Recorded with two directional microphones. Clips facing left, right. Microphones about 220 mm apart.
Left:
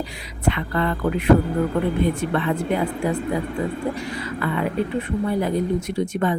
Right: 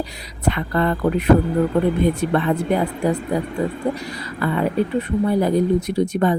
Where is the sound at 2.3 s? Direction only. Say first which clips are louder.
Right 3 dB; 40° right (ahead or behind).